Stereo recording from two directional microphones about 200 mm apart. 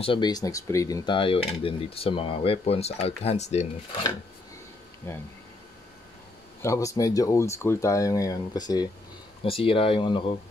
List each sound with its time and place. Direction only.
0.0 s speech: 25° left (ahead or behind)
5.1 s speech: 15° left (ahead or behind)
6.6 s speech: 15° left (ahead or behind)